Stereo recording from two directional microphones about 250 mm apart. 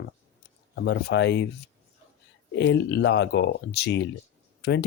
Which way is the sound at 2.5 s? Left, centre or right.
Left.